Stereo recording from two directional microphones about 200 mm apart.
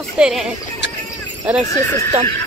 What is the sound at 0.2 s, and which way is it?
Speech, 5° right (ahead or behind).